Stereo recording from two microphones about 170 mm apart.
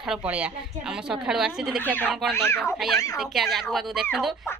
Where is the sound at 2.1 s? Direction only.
Centre (ahead or behind).